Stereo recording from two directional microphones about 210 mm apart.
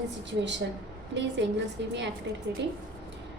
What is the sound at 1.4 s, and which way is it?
Speech, 55° right (ahead or behind).